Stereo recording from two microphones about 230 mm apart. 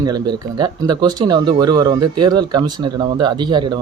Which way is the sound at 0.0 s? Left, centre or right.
Centre.